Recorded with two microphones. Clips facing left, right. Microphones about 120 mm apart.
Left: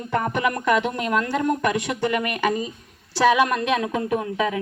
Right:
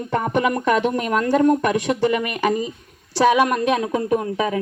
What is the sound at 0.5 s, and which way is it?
Speech, 35° right (ahead or behind).